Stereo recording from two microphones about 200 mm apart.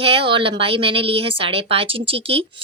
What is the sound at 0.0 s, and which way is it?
Speech, 25° right (ahead or behind).